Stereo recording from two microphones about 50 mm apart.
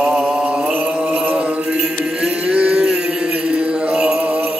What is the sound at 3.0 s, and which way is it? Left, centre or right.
Mantra, right.